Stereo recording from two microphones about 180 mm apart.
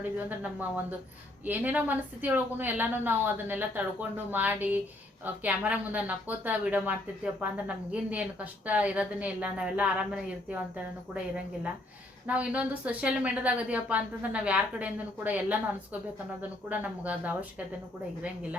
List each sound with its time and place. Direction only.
0.3 s a woman's voice: 10° right (ahead or behind)
12.2 s a woman's voice: 5° right (ahead or behind)